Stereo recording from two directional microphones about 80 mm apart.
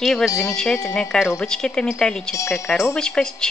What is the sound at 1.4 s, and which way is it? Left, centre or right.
Speech, centre.